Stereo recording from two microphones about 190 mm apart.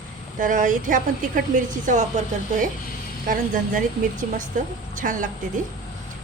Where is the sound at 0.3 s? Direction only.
45° right (ahead or behind).